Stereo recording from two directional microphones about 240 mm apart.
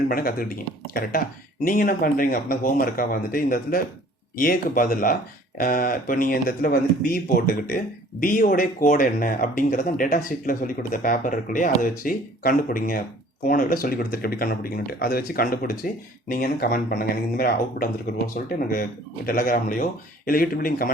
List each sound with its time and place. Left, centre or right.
0.1 s speech: left
1.6 s speech: left